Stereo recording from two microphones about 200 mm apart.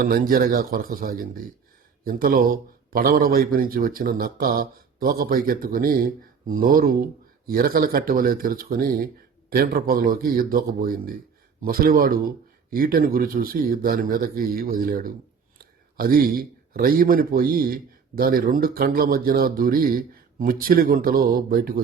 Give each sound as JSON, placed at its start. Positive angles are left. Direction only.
{"t": 0.0, "sound": "a man's voice", "side_deg": -45}